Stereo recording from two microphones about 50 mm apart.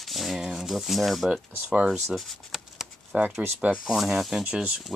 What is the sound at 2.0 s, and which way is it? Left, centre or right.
Speech, centre.